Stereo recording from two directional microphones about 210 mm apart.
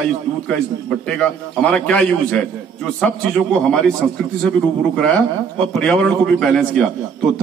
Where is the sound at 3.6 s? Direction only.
5° left (ahead or behind).